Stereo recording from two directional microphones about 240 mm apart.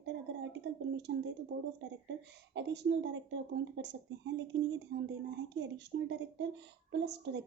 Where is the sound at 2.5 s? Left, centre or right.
Right.